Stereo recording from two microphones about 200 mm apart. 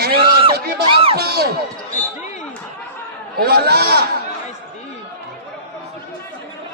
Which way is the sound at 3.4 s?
50° right (ahead or behind).